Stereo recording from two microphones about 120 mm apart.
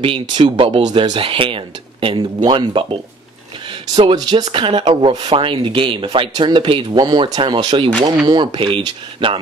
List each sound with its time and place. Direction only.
0.0 s speech: 45° right (ahead or behind)